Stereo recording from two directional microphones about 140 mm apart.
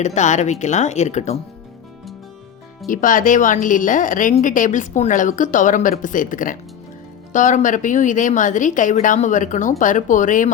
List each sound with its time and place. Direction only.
0.0 s a woman's voice: 60° left (ahead or behind)
2.8 s a woman's voice: 70° left (ahead or behind)